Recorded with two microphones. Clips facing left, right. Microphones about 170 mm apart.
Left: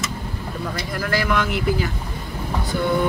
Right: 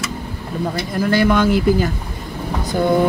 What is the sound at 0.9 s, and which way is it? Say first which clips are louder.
Speech: right 7 dB; 25° right (ahead or behind).